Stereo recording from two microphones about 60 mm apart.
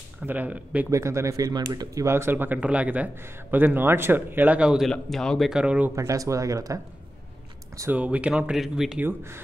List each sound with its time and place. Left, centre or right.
0.3 s speech: right
0.8 s speech: right
1.3 s speech: right
2.0 s speech: right
2.6 s speech: right
3.5 s speech: right
4.5 s speech: centre
5.1 s speech: centre
5.5 s speech: centre
5.9 s speech: right
7.9 s speech: right
8.5 s speech: centre
9.0 s speech: right